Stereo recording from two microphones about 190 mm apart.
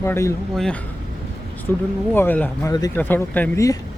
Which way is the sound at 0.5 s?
5° left (ahead or behind).